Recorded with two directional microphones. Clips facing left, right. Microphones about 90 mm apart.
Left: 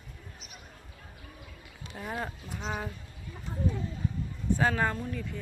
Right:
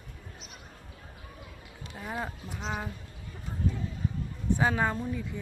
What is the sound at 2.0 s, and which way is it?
Speech, 5° right (ahead or behind).